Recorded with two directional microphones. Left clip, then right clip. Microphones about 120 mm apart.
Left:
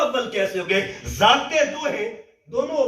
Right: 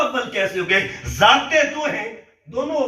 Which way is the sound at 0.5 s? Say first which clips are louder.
Right 3 dB; 35° left (ahead or behind).